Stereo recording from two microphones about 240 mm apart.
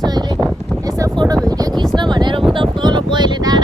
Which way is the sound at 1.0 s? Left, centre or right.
Centre.